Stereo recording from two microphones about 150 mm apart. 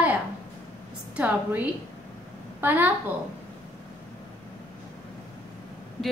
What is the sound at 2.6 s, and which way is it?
Speech, 10° right (ahead or behind).